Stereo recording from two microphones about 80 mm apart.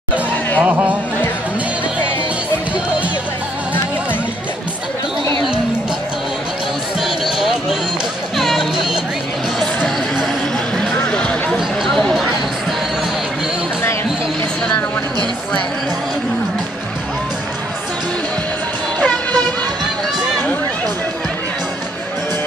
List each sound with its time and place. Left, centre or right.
0.6 s speech: centre
8.4 s music: centre
10.8 s a sound: centre
18.9 s music: centre